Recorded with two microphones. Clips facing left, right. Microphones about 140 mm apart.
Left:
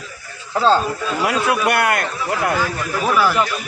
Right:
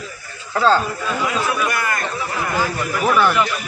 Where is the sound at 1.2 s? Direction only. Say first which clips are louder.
Left 5 dB; 70° left (ahead or behind).